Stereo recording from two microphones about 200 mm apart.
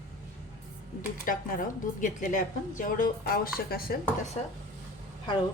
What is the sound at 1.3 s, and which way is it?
A woman's voice, 40° left (ahead or behind).